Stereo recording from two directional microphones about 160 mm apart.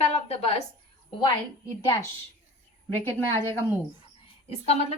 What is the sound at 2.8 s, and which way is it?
Speech, 10° left (ahead or behind).